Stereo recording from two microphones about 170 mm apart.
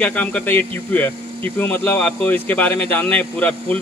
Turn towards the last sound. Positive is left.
turn(degrees=10)  # may be behind; listen again after turning